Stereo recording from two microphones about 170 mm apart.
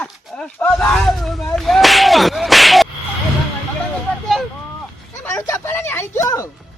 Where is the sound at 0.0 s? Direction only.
5° left (ahead or behind).